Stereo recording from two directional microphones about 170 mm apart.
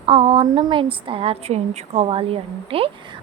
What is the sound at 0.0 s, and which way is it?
A woman's voice, 35° right (ahead or behind).